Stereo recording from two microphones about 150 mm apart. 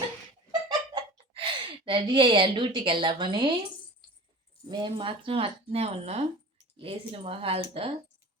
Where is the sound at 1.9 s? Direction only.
35° right (ahead or behind).